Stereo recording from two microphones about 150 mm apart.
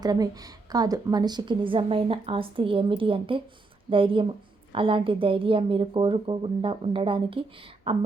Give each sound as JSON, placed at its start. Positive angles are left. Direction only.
{"t": 0.0, "sound": "a woman's voice", "side_deg": -25}